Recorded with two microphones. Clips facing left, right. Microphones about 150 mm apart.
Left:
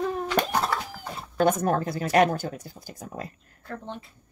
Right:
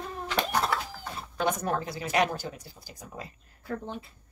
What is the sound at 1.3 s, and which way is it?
Speech, 45° left (ahead or behind).